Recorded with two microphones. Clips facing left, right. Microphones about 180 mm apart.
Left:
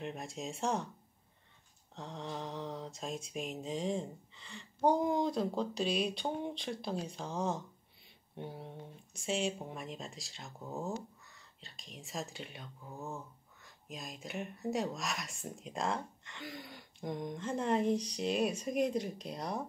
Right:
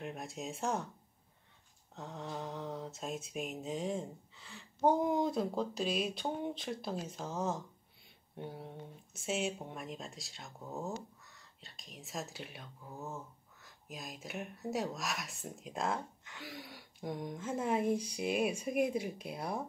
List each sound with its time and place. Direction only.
0.0 s speech: centre (ahead or behind)
2.0 s speech: 5° right (ahead or behind)